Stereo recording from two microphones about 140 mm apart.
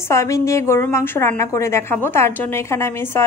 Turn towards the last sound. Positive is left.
turn(degrees=15)  # may be behind; listen again after turning